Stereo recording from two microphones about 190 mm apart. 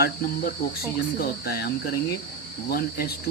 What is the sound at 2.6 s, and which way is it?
Cricket, 55° left (ahead or behind).